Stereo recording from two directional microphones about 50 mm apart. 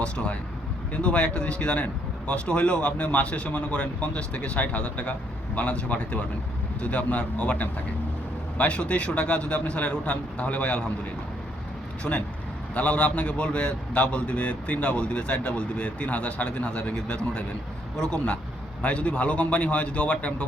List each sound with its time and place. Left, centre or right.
0.0 s a man's voice: left
12.1 s speech: left
12.7 s a man's voice: left
18.0 s a man's voice: left